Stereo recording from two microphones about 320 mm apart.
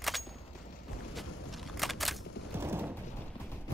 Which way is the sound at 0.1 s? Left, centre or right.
Centre.